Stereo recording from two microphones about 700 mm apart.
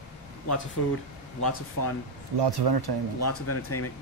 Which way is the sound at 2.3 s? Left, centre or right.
Right.